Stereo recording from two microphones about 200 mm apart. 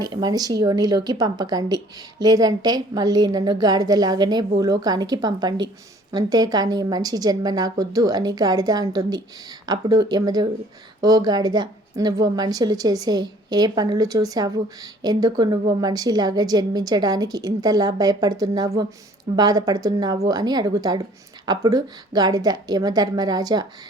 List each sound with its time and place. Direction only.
0.0 s a woman's voice: 20° right (ahead or behind)